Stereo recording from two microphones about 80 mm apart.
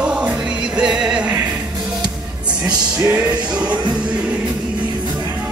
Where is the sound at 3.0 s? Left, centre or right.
Right.